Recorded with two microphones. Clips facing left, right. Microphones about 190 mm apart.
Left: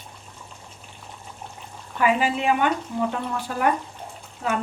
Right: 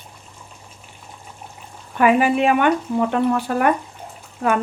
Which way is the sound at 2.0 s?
60° right (ahead or behind).